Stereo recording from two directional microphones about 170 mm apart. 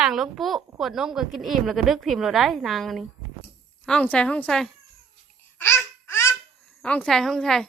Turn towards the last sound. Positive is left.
turn(degrees=5)  # may be behind; listen again after turning